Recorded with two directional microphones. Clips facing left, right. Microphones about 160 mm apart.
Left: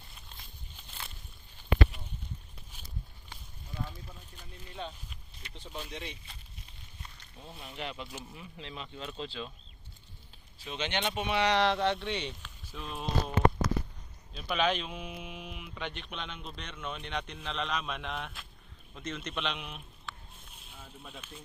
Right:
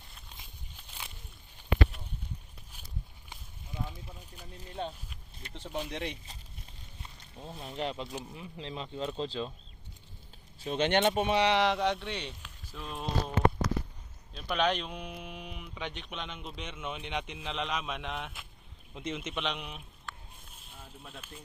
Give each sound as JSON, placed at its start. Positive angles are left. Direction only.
{"t": 0.3, "sound": "walk", "side_deg": -10}
{"t": 3.2, "sound": "a sound", "side_deg": -15}
{"t": 4.5, "sound": "a sound", "side_deg": -40}
{"t": 5.6, "sound": "speech", "side_deg": -65}
{"t": 7.0, "sound": "speech", "side_deg": -30}
{"t": 8.0, "sound": "speech", "side_deg": -20}
{"t": 10.6, "sound": "speech", "side_deg": -50}
{"t": 11.6, "sound": "speech", "side_deg": -5}
{"t": 14.3, "sound": "speech", "side_deg": 5}
{"t": 18.9, "sound": "speech", "side_deg": -15}
{"t": 20.7, "sound": "a sound", "side_deg": -5}